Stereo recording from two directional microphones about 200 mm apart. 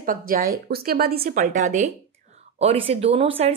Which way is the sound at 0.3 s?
50° right (ahead or behind).